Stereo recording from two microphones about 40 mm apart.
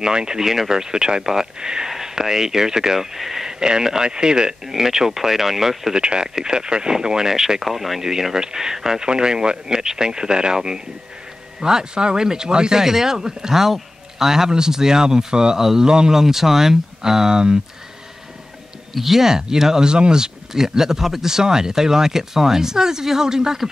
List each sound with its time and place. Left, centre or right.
0.0 s speech: centre
18.9 s speech: centre